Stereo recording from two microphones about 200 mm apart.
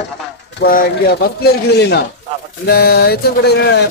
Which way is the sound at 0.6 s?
50° left (ahead or behind).